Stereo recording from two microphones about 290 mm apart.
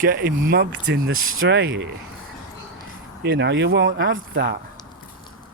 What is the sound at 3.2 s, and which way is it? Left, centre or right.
Speech, right.